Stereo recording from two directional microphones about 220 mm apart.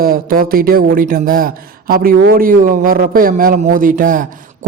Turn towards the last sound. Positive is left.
turn(degrees=-35)  # may be behind; listen again after turning